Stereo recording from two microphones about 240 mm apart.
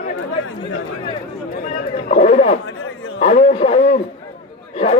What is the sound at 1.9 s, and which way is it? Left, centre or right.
Speech, left.